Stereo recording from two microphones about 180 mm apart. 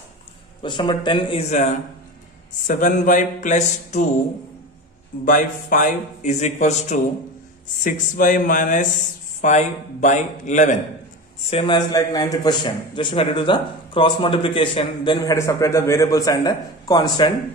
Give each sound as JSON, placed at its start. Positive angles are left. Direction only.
{"t": 0.6, "sound": "a man's voice", "side_deg": 25}
{"t": 5.2, "sound": "a man's voice", "side_deg": 50}
{"t": 11.5, "sound": "a man's voice", "side_deg": 25}
{"t": 15.3, "sound": "a man's voice", "side_deg": 15}